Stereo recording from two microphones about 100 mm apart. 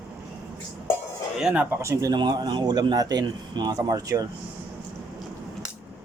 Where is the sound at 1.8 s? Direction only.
30° right (ahead or behind).